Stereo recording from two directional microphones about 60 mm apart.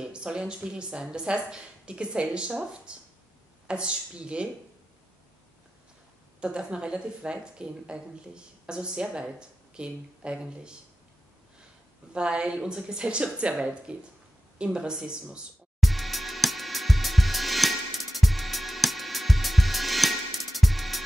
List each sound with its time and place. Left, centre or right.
0.0 s speech: centre
6.4 s speech: centre
12.1 s speech: centre
15.8 s music: centre